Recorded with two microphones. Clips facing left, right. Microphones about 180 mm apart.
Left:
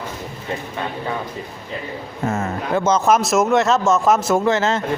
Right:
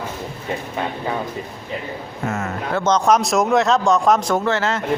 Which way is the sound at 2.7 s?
10° left (ahead or behind).